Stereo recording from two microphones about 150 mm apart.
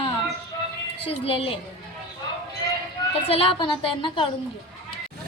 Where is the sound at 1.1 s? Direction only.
40° left (ahead or behind).